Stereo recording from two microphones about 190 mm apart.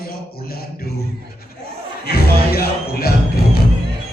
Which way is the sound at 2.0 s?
55° left (ahead or behind).